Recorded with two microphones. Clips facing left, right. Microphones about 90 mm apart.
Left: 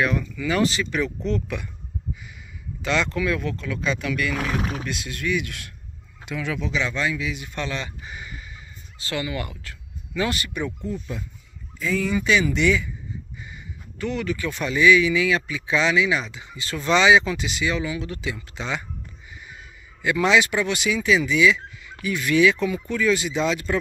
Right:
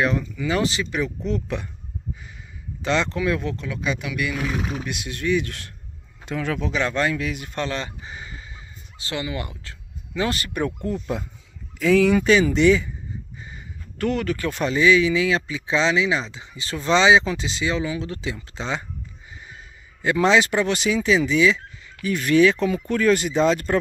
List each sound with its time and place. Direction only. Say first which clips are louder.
0.0 s speech: right 1 dB; 25° right (ahead or behind)
2.8 s speech: right 1 dB; 30° right (ahead or behind)
4.6 s speech: even; 30° left (ahead or behind)
4.8 s speech: right 2 dB; 20° right (ahead or behind); by 10.7 s 40° right (ahead or behind)
10.8 s speech: right 4 dB; 80° right
12.2 s speech: right 4 dB; 35° right (ahead or behind)
13.9 s speech: right 3 dB; 45° right (ahead or behind); by 18.9 s 30° right (ahead or behind)
20.0 s speech: right 1 dB; 35° right (ahead or behind)